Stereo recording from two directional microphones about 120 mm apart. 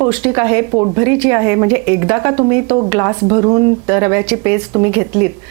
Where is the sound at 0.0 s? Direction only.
20° right (ahead or behind).